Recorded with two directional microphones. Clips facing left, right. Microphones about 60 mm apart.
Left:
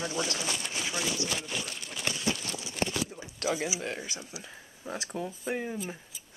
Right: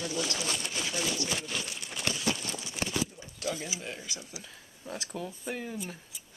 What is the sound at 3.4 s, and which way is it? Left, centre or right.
Speech, centre.